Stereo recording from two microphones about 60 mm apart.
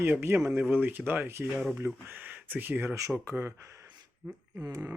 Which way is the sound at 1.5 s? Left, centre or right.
Centre.